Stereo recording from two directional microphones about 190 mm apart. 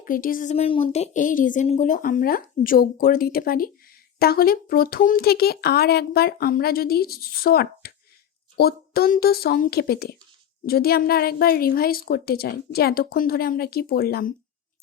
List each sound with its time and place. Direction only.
0.0 s speech: 45° left (ahead or behind)
0.5 s speech: 30° left (ahead or behind); by 14.3 s 50° left (ahead or behind)